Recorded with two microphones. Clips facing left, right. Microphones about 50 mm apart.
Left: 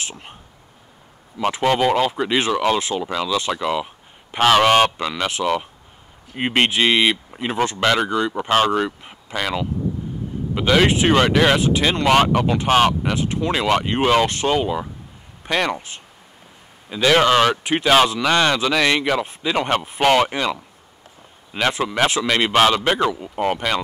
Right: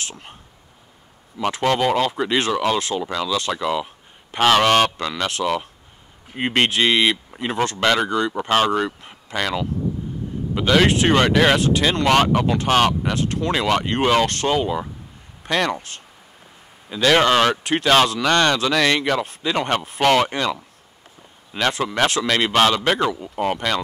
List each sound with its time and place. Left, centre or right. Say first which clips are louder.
0.0 s speech: left 1 dB; left
1.5 s speech: left 1 dB; centre
3.6 s a sound: even; centre
4.4 s speech: left 1 dB; centre
11.6 s speech: even; centre
16.9 s speech: left 1 dB; centre